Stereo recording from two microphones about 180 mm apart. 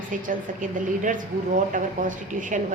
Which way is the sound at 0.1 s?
45° right (ahead or behind).